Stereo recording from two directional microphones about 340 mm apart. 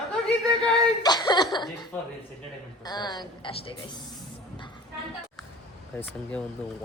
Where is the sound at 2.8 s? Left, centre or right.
Centre.